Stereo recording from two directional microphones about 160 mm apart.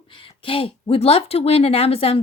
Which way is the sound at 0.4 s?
35° left (ahead or behind).